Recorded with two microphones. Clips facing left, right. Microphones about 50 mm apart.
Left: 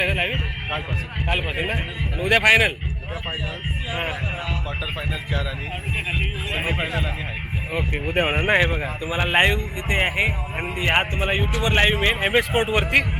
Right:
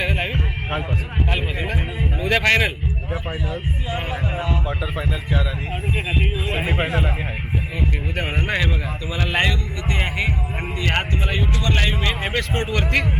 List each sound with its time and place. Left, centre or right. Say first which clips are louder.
0.0 s a sound: left 1 dB; centre
1.3 s music: left 3 dB; centre
2.4 s speech: left 2 dB; centre
3.9 s speech: right 1 dB; centre
8.1 s speech: left 7 dB; left
12.2 s speech: left 4 dB; centre